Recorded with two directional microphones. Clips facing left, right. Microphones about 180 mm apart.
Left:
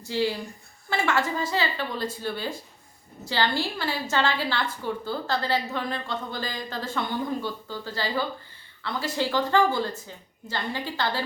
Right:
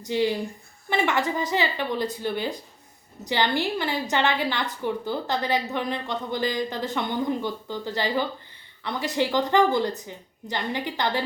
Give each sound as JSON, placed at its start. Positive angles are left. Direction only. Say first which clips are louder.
{"t": 0.0, "sound": "a woman's voice", "louder": "right 3 dB", "side_deg": -20}